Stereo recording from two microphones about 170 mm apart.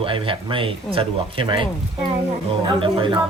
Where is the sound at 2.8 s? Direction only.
30° right (ahead or behind).